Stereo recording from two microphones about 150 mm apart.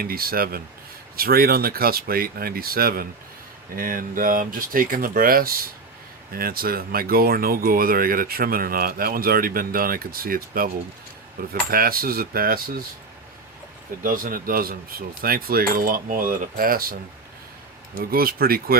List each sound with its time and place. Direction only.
0.0 s speech: 80° right
3.8 s speech: 65° right (ahead or behind)
14.0 s speech: 70° right (ahead or behind)
18.0 s speech: 80° right